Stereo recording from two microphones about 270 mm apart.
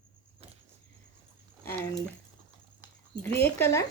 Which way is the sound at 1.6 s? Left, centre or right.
Centre.